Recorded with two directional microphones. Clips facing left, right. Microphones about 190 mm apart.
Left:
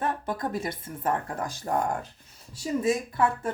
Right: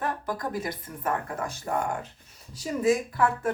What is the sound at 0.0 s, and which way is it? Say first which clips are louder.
A woman's voice: left 1 dB; 25° left (ahead or behind).